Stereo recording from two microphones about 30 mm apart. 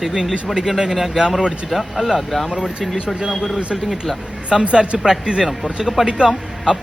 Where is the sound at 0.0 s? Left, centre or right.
Centre.